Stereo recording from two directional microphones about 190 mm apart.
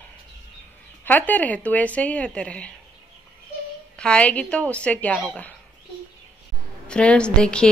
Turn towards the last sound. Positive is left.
turn(degrees=5)  # may be behind; listen again after turning